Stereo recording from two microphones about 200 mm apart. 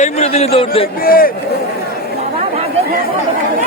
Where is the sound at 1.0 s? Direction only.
45° left (ahead or behind).